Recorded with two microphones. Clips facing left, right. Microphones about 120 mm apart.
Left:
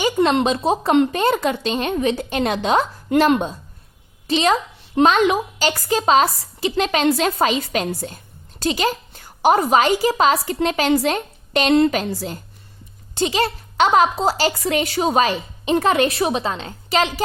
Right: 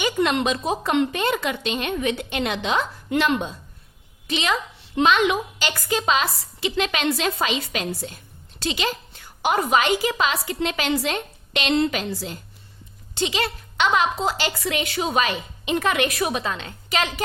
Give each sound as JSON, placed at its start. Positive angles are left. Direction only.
{"t": 0.0, "sound": "a woman's voice", "side_deg": 35}